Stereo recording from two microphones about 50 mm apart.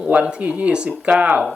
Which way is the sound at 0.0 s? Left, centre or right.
Right.